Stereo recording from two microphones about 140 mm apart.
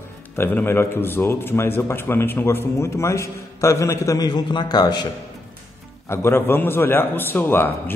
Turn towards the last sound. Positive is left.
turn(degrees=15)  # may be behind; listen again after turning